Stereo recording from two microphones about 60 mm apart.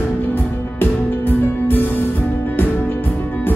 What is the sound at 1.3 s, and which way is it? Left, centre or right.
Music, left.